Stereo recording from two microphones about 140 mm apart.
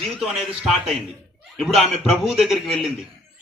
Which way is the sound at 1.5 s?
Centre (ahead or behind).